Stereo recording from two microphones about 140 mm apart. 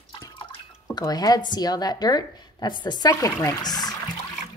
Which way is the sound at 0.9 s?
30° left (ahead or behind).